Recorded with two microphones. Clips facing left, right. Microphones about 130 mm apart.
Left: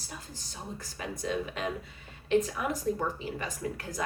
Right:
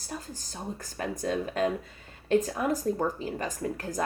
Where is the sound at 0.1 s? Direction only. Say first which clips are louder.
Right 7 dB; 45° right (ahead or behind).